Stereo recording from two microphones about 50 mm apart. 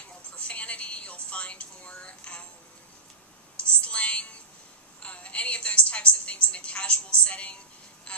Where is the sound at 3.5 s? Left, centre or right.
Left.